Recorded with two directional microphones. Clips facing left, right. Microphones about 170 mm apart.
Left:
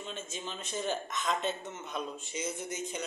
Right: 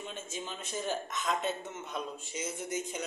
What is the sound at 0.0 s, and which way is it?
A man's voice, 10° right (ahead or behind).